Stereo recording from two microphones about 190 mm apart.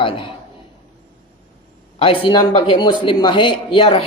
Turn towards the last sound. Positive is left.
turn(degrees=30)  # may be behind; listen again after turning